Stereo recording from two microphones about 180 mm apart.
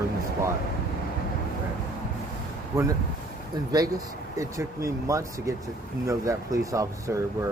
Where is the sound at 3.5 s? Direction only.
20° right (ahead or behind).